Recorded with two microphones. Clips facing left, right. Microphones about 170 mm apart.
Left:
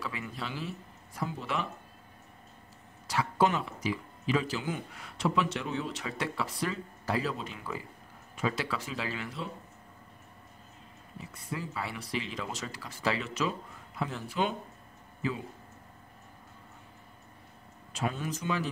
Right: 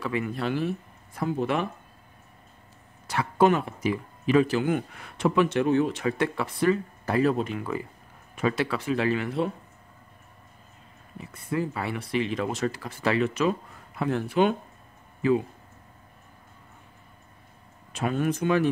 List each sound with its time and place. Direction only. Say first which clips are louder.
0.0 s speech: right 10 dB; 60° right (ahead or behind)
3.1 s speech: right 6 dB; 55° right (ahead or behind)
11.1 s speech: right 10 dB; 55° right (ahead or behind)
17.9 s speech: right 8 dB; 60° right (ahead or behind)